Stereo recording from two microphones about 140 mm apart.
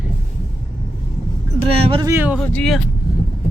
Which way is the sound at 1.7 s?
45° right (ahead or behind).